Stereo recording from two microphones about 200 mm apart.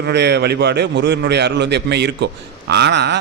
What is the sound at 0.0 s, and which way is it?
Speech, 55° right (ahead or behind).